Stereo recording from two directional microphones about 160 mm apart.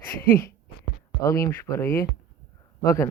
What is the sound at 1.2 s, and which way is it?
A man's voice, 20° left (ahead or behind).